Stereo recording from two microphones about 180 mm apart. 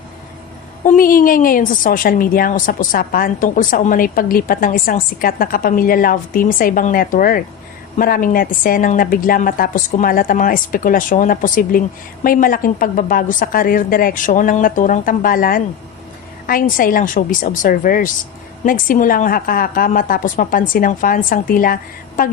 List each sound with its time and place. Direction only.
0.9 s a woman's voice: 50° left (ahead or behind)